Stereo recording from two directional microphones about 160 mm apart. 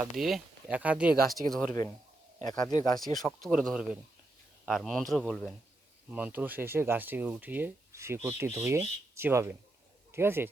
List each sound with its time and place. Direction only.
0.0 s speech: centre (ahead or behind)
2.6 s speech: 25° left (ahead or behind)
3.2 s speech: centre (ahead or behind); by 10.5 s 15° right (ahead or behind)